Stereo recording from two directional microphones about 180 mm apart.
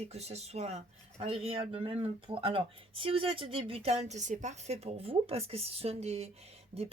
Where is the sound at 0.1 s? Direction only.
35° right (ahead or behind).